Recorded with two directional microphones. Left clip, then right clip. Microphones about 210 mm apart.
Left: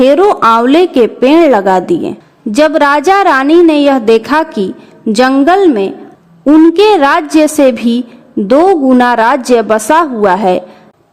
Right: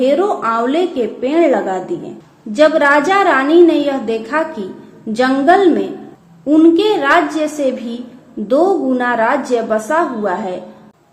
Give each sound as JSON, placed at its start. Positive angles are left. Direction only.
{"t": 0.0, "sound": "a woman's voice", "side_deg": 50}